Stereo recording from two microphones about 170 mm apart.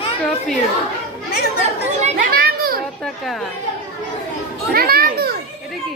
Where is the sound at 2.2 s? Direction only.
60° right (ahead or behind).